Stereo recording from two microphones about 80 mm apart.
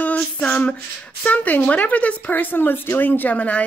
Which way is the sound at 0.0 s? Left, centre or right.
Centre.